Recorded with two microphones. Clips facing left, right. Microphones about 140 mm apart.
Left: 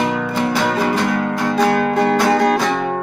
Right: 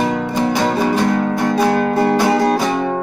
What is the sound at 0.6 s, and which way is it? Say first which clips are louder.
Music: right 2 dB; 20° right (ahead or behind).